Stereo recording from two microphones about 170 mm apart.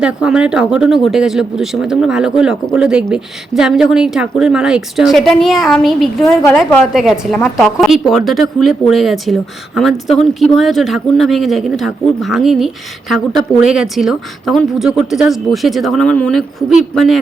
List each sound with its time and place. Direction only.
0.0 s speech: 5° right (ahead or behind)